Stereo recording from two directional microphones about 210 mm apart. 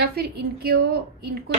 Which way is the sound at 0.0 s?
50° right (ahead or behind).